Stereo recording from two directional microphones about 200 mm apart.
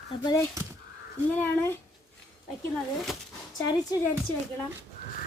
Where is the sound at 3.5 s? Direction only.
20° left (ahead or behind).